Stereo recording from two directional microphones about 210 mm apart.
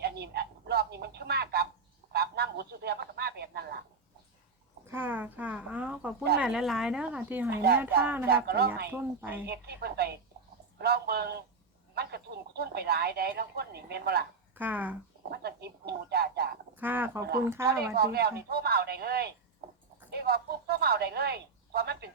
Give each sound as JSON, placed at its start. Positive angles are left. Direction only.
{"t": 0.0, "sound": "telephone", "side_deg": -50}
{"t": 2.1, "sound": "a sound", "side_deg": -50}
{"t": 4.9, "sound": "a woman's voice", "side_deg": -10}
{"t": 7.5, "sound": "speech", "side_deg": -50}
{"t": 8.0, "sound": "speech", "side_deg": -10}
{"t": 8.4, "sound": "speech", "side_deg": -50}
{"t": 8.9, "sound": "speech", "side_deg": -10}
{"t": 9.5, "sound": "speech", "side_deg": -50}
{"t": 14.5, "sound": "speech", "side_deg": -10}
{"t": 15.3, "sound": "speech", "side_deg": -50}
{"t": 16.7, "sound": "speech", "side_deg": -10}
{"t": 17.9, "sound": "a woman's voice", "side_deg": -50}